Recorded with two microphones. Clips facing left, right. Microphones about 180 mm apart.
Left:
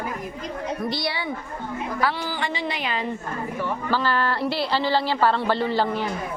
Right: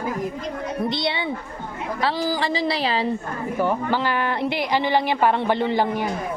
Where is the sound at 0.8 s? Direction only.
20° right (ahead or behind).